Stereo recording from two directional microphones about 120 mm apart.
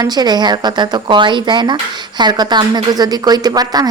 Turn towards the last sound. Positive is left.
turn(degrees=-35)  # may be behind; listen again after turning